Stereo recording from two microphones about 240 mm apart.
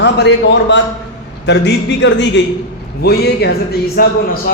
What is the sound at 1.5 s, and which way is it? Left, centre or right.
A man's voice, left.